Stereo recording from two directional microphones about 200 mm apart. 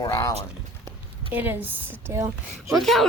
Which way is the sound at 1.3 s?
10° right (ahead or behind).